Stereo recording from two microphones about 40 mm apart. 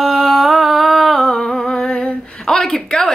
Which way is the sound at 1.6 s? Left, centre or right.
Left.